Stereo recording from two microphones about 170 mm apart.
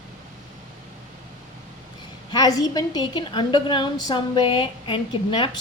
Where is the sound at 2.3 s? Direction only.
20° left (ahead or behind).